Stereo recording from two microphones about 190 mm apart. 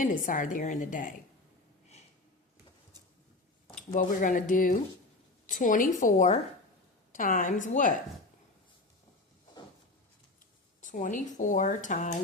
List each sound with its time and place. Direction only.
0.0 s speech: 45° left (ahead or behind)
3.9 s speech: 45° left (ahead or behind)
10.8 s speech: 45° left (ahead or behind)